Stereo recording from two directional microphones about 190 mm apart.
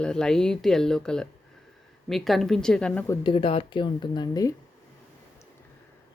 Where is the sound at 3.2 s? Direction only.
30° left (ahead or behind).